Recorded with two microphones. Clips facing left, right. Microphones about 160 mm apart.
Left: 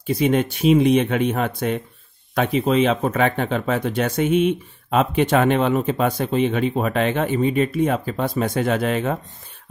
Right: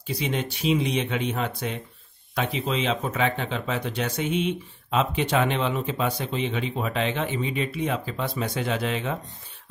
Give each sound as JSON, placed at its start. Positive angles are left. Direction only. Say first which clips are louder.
{"t": 0.0, "sound": "speech", "louder": "left 9 dB", "side_deg": 50}